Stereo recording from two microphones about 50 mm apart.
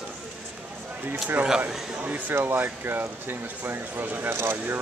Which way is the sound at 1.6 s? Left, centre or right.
Right.